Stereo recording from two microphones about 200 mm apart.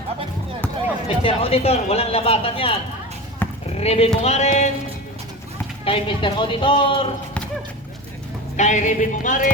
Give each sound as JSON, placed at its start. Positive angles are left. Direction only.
{"t": 1.0, "sound": "speech", "side_deg": 30}
{"t": 3.4, "sound": "a sound", "side_deg": 10}
{"t": 3.8, "sound": "speech", "side_deg": 30}
{"t": 5.8, "sound": "speech", "side_deg": 25}
{"t": 8.5, "sound": "speech", "side_deg": 35}